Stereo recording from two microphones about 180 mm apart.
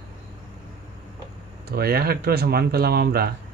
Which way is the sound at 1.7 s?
60° right (ahead or behind).